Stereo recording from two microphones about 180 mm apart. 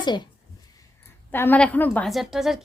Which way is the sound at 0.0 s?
25° left (ahead or behind).